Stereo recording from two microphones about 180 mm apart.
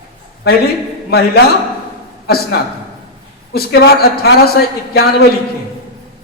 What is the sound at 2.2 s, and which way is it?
A man's voice, 60° left (ahead or behind).